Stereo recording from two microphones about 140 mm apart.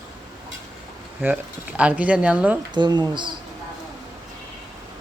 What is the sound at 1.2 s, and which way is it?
Speech, 10° right (ahead or behind).